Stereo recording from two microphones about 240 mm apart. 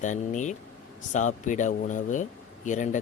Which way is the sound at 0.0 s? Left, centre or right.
Left.